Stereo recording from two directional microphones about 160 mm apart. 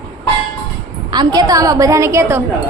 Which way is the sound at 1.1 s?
25° right (ahead or behind).